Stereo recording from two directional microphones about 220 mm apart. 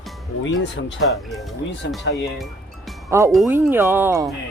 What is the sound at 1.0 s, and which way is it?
Speech, centre (ahead or behind).